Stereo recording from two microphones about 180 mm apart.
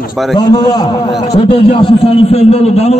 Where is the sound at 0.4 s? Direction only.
20° left (ahead or behind).